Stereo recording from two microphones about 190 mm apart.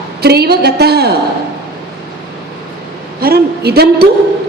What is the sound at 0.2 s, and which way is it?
Speech, 55° right (ahead or behind).